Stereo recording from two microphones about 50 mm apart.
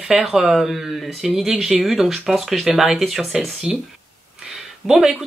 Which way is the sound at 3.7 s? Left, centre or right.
Centre.